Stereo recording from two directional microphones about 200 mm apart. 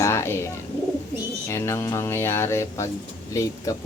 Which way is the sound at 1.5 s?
15° left (ahead or behind).